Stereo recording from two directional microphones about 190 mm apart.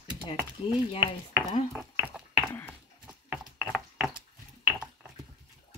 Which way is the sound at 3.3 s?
5° right (ahead or behind).